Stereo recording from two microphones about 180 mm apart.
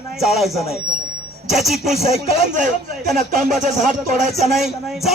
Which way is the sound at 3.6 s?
45° right (ahead or behind).